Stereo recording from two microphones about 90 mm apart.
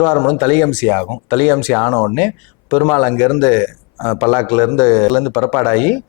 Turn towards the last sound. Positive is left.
turn(degrees=15)  # may be behind; listen again after turning